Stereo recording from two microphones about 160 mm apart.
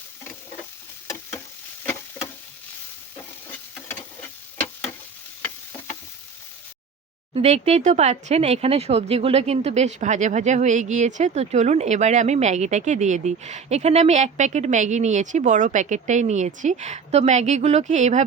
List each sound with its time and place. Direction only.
1.8 s frying: 10° left (ahead or behind)
7.3 s speech: 40° right (ahead or behind)